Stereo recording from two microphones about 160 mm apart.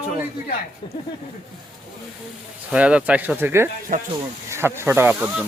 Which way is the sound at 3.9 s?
50° right (ahead or behind).